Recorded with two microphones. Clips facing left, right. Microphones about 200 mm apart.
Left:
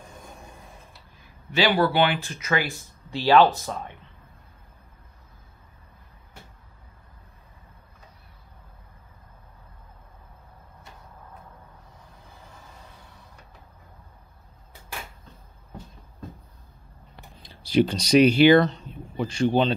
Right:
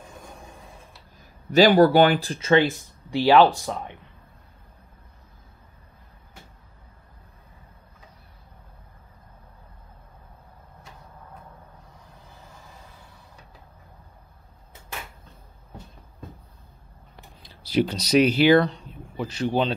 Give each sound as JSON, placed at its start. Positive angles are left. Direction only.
{"t": 1.2, "sound": "speech", "side_deg": -40}
{"t": 17.4, "sound": "speech", "side_deg": -5}